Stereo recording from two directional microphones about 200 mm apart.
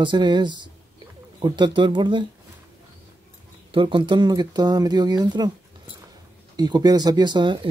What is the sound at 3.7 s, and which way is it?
Speech, 25° right (ahead or behind).